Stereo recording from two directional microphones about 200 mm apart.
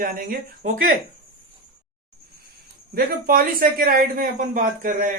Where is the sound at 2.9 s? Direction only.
45° right (ahead or behind).